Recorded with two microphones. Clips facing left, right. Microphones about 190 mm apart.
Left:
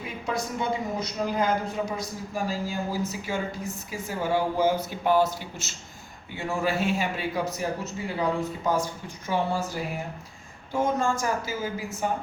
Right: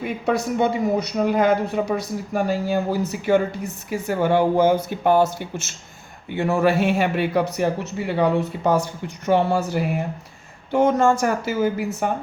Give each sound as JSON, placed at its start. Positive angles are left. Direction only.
{"t": 0.0, "sound": "speech", "side_deg": -65}
{"t": 6.3, "sound": "a man's voice", "side_deg": -65}